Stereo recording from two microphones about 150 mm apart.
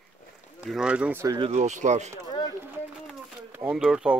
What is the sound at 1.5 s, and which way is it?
Speech, 55° right (ahead or behind).